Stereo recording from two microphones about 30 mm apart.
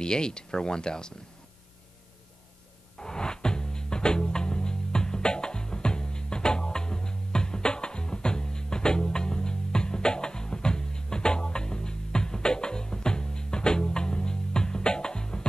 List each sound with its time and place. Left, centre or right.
0.0 s speech: left
3.0 s music: left